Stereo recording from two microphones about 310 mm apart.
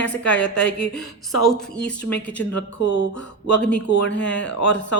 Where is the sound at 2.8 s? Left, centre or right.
Left.